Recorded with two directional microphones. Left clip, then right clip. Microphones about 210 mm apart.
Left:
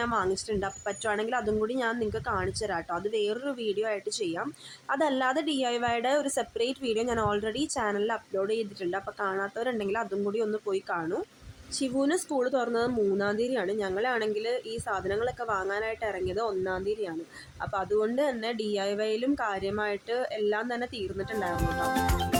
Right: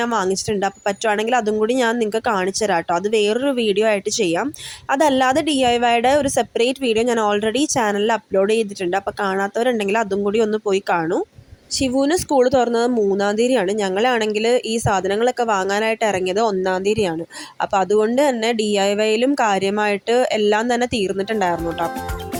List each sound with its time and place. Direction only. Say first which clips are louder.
0.0 s a woman's voice: right 9 dB; 35° right (ahead or behind)